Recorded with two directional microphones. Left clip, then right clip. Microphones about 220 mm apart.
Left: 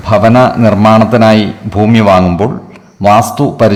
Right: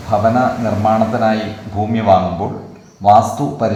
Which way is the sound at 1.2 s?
45° left (ahead or behind).